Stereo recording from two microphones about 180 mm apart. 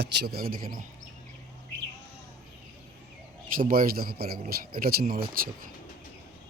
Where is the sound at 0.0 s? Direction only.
65° right (ahead or behind).